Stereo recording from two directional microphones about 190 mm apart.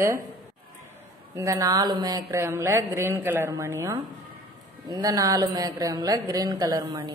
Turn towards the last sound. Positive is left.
turn(degrees=-20)  # may be behind; listen again after turning